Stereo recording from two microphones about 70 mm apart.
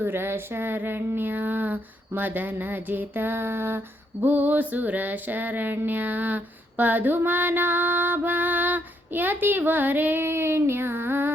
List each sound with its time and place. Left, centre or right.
0.0 s music: right